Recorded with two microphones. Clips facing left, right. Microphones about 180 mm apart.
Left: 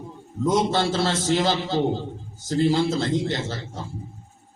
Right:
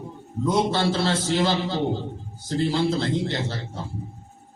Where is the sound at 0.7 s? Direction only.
45° left (ahead or behind).